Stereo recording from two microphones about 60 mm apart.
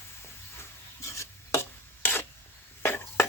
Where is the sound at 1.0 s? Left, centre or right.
Left.